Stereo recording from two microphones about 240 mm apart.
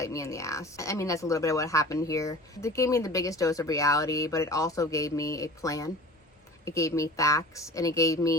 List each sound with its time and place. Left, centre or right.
0.0 s speech: centre